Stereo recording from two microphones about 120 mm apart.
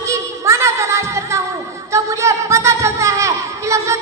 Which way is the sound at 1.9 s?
25° right (ahead or behind).